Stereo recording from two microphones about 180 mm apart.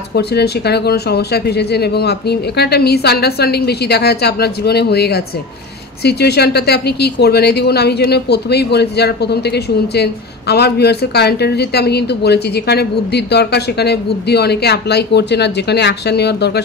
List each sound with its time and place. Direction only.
0.1 s speech: 65° left (ahead or behind)